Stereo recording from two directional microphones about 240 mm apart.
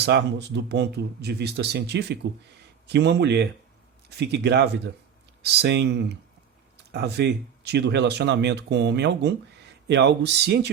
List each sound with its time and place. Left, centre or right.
0.0 s speech: right